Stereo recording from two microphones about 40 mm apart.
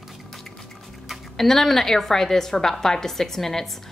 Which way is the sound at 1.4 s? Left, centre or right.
Centre.